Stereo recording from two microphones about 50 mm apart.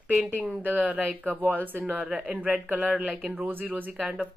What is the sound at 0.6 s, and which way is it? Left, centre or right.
Speech, right.